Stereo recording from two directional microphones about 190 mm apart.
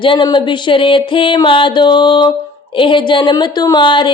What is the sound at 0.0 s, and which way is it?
Speech, 25° left (ahead or behind).